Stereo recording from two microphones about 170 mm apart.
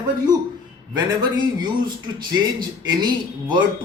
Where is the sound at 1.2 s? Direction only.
25° right (ahead or behind).